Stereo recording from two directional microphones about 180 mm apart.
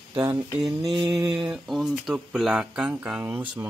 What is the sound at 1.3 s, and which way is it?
Speech, centre (ahead or behind).